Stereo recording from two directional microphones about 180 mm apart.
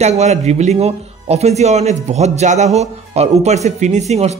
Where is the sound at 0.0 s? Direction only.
40° right (ahead or behind).